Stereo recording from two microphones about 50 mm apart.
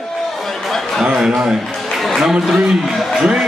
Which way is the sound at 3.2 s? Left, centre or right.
Centre.